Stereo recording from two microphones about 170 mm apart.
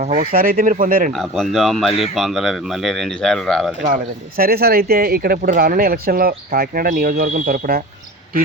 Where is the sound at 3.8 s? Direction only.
55° right (ahead or behind).